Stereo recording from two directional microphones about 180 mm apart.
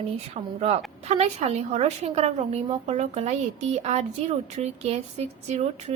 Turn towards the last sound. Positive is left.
turn(degrees=-40)  # may be behind; listen again after turning